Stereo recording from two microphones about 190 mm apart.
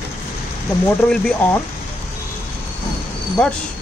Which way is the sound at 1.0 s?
5° left (ahead or behind).